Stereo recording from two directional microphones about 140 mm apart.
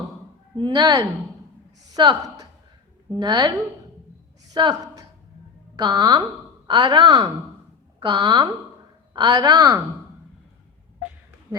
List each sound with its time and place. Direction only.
0.5 s a woman's voice: 30° right (ahead or behind)
3.2 s a woman's voice: 30° right (ahead or behind)